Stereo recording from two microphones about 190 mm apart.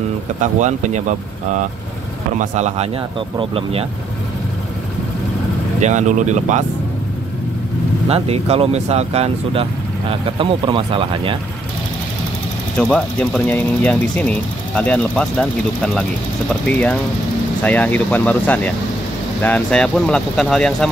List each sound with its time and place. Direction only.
0.4 s speech: 40° right (ahead or behind)
5.8 s speech: 40° right (ahead or behind)
8.1 s speech: 30° right (ahead or behind)
12.7 s speech: 5° left (ahead or behind)
17.6 s speech: 10° left (ahead or behind)